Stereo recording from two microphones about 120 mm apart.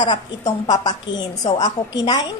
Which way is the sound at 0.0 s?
35° left (ahead or behind).